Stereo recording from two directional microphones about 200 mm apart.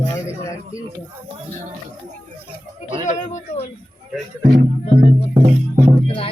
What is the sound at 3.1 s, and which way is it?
Speech, 35° left (ahead or behind).